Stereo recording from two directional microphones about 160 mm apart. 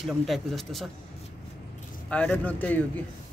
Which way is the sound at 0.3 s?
Centre (ahead or behind).